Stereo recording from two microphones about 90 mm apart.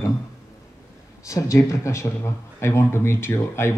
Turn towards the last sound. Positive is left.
turn(degrees=30)  # may be behind; listen again after turning